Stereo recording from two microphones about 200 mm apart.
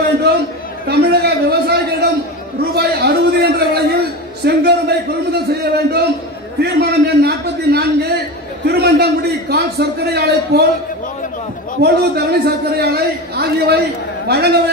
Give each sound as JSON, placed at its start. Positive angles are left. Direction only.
{"t": 0.8, "sound": "a sound", "side_deg": -55}
{"t": 8.6, "sound": "a man's voice", "side_deg": -55}
{"t": 11.8, "sound": "a man's voice", "side_deg": -55}